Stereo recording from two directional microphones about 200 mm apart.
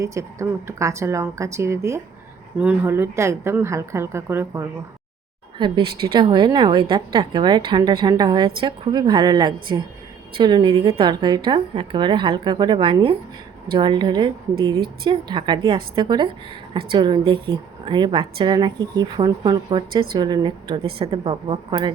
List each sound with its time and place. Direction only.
0.0 s speech: 15° right (ahead or behind)
5.5 s a woman's voice: 25° right (ahead or behind)